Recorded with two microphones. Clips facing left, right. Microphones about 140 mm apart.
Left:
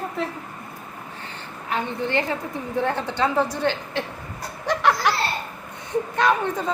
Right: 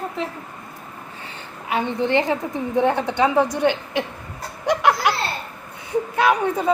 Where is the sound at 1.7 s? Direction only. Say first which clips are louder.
Right 5 dB; 20° right (ahead or behind).